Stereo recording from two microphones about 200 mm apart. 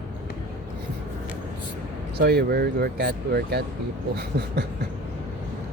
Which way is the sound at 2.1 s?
50° right (ahead or behind).